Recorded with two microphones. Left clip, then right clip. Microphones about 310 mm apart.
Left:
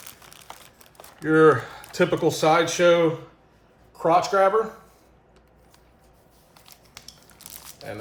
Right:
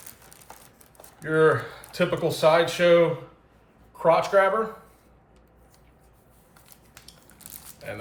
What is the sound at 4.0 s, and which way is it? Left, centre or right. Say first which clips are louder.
Speech: even; centre.